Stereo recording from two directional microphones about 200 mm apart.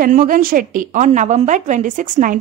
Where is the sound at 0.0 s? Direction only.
45° right (ahead or behind).